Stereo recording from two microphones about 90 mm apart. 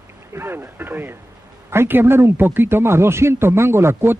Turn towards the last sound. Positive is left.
turn(degrees=-30)  # may be behind; listen again after turning